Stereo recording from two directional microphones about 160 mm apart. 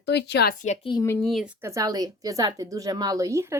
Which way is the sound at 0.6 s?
45° left (ahead or behind).